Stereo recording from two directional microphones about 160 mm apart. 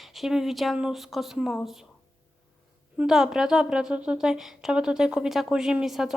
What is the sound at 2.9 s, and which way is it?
A woman's voice, 5° right (ahead or behind).